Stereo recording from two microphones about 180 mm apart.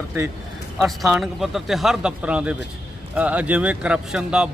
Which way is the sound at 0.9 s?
Centre (ahead or behind).